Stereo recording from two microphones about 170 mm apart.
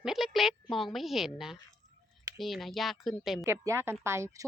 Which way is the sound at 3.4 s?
15° right (ahead or behind).